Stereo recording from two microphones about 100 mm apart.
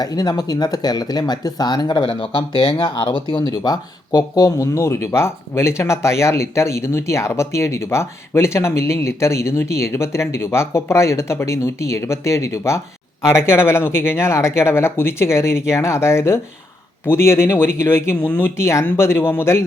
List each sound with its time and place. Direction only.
0.0 s speech: 40° left (ahead or behind); by 19.6 s 25° left (ahead or behind)